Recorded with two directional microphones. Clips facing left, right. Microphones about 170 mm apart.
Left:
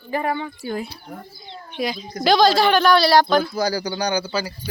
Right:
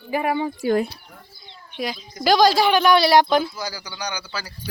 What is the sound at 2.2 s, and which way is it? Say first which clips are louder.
Speech: left 1 dB; 10° right (ahead or behind).